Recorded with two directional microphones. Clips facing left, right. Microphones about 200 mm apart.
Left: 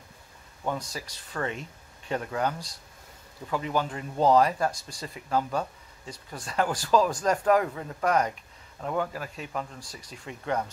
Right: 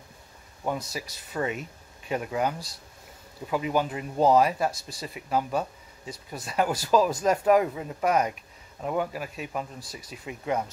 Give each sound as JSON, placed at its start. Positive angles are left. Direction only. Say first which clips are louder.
{"t": 0.7, "sound": "speech", "louder": "right 1 dB", "side_deg": -10}